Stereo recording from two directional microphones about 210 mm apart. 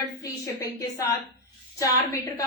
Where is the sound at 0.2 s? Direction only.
15° left (ahead or behind).